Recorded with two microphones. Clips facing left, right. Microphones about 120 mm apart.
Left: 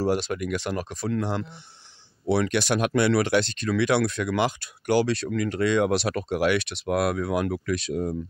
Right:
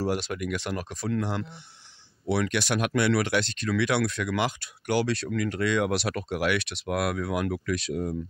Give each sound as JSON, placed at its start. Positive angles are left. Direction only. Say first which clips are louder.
{"t": 0.0, "sound": "speech", "louder": "left 3 dB", "side_deg": 35}